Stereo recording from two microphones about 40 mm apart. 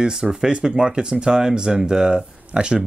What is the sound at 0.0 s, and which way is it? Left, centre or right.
Speech, centre.